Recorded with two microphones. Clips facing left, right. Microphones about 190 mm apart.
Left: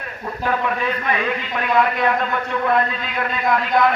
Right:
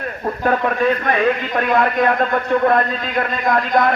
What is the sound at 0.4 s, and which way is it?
A man's voice, 45° right (ahead or behind).